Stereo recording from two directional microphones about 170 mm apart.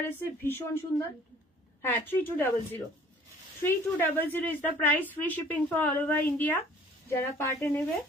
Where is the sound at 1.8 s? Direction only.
10° left (ahead or behind).